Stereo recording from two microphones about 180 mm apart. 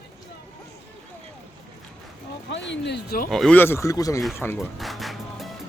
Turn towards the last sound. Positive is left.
turn(degrees=0)  # may be behind; listen again after turning